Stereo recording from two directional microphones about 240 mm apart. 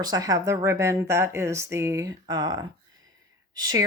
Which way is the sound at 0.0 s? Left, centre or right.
Centre.